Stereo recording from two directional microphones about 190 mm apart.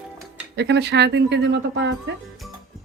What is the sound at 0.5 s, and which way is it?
A woman's voice, 65° right (ahead or behind).